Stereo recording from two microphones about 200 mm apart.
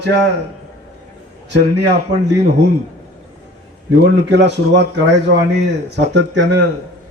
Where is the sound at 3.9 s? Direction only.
60° right (ahead or behind).